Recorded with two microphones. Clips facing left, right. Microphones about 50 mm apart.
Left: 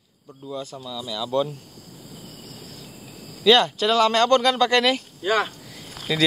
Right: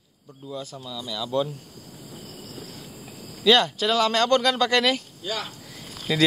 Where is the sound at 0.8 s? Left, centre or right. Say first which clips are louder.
Left 1 dB; centre.